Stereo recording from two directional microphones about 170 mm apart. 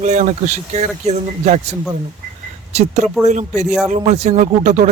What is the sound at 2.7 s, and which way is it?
Speech, 40° right (ahead or behind).